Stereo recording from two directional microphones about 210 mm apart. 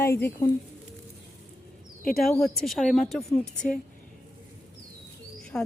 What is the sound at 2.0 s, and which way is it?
Speech, 45° left (ahead or behind).